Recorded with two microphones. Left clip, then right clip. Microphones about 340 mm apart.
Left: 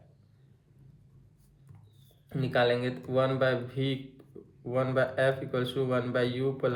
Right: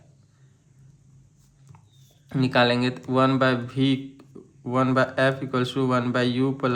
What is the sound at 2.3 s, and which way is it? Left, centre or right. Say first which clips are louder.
Speech: right 6 dB; centre.